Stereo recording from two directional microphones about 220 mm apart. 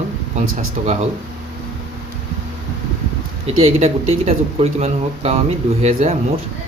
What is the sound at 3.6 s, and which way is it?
Speech, 30° right (ahead or behind).